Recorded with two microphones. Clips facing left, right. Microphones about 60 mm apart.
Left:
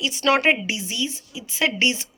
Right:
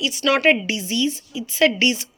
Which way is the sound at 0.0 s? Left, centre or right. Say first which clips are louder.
Right 1 dB; left.